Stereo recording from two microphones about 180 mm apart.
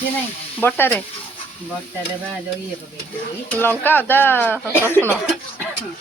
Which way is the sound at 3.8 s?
10° left (ahead or behind).